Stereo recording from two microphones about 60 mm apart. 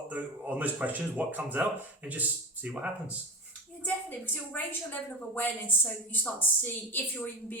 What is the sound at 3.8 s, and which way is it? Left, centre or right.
A woman's voice, left.